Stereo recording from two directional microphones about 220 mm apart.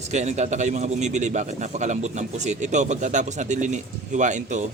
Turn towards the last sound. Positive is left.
turn(degrees=-35)  # may be behind; listen again after turning